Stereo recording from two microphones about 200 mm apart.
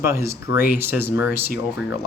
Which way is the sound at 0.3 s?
15° right (ahead or behind).